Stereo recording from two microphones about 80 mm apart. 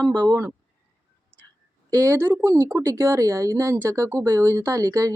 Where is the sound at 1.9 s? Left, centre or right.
Right.